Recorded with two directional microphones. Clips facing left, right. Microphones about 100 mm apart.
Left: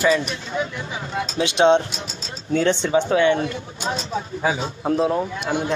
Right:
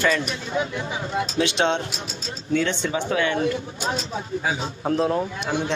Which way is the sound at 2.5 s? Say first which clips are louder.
Left 4 dB; 30° left (ahead or behind).